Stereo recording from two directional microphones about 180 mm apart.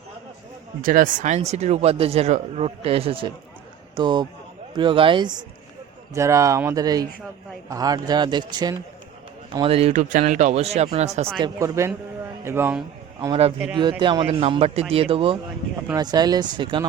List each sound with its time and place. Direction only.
0.8 s a man's voice: 50° right (ahead or behind)
11.3 s speech: 20° right (ahead or behind)
13.2 s a man's voice: 30° right (ahead or behind)